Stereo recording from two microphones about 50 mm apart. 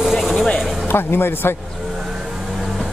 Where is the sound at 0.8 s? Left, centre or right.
Left.